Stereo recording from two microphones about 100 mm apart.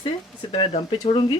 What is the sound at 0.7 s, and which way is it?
Speech, 65° left (ahead or behind).